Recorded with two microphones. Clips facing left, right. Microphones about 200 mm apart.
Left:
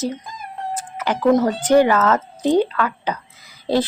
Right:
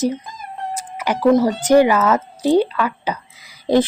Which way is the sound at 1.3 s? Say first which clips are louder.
Right 2 dB; centre (ahead or behind).